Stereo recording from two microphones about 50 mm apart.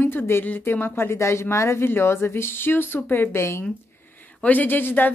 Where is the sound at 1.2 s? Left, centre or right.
Left.